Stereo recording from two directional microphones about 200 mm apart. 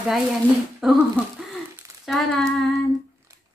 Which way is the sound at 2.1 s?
Centre (ahead or behind).